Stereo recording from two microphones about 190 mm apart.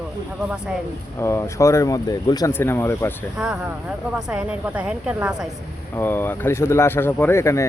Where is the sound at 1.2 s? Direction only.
15° left (ahead or behind).